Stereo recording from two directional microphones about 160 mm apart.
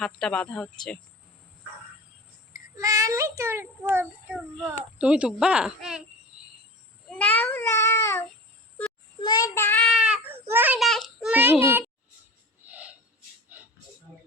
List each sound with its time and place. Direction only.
0.0 s speech: 5° left (ahead or behind)
2.7 s a child's voice: 20° right (ahead or behind); by 6.0 s 5° right (ahead or behind)
7.1 s a child's voice: 10° left (ahead or behind)
9.2 s a child's voice: 25° left (ahead or behind)
9.9 s baby cry: 5° right (ahead or behind)
10.5 s a child's voice: 10° right (ahead or behind)
10.8 s a child's voice: centre (ahead or behind)
12.6 s a sound: 10° right (ahead or behind)